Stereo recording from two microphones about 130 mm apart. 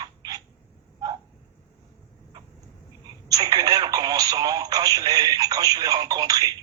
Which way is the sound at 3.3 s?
30° right (ahead or behind).